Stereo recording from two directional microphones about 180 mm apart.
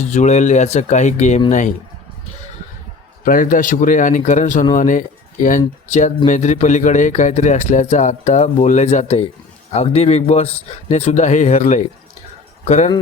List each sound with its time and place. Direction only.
0.1 s a man's voice: 40° left (ahead or behind)
3.2 s a man's voice: 45° left (ahead or behind)